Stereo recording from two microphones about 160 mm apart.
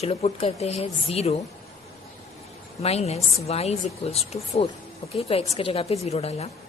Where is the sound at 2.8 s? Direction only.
40° left (ahead or behind).